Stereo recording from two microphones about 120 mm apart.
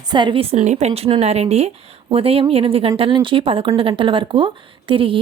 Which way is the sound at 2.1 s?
50° right (ahead or behind).